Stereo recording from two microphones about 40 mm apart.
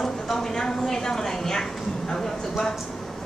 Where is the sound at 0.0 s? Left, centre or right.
Centre.